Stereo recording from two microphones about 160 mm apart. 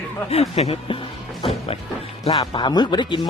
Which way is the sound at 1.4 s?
40° left (ahead or behind).